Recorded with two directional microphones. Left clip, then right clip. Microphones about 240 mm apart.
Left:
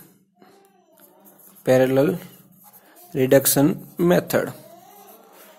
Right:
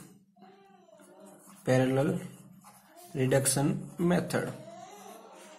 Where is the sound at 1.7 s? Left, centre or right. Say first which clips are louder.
Left 10 dB; left.